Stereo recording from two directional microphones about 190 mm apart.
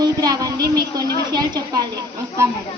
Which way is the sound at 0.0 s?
20° right (ahead or behind).